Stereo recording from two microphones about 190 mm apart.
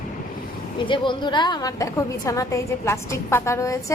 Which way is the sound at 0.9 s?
25° left (ahead or behind).